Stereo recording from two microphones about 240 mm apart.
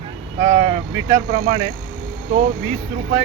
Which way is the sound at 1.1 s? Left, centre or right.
Right.